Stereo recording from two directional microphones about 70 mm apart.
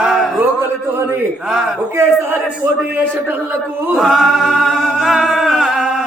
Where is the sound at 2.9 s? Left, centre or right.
Right.